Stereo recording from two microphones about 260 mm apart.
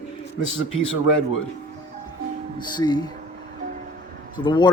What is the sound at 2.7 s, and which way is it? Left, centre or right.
Speech, centre.